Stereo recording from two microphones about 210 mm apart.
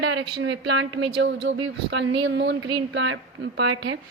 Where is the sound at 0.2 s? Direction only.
55° right (ahead or behind).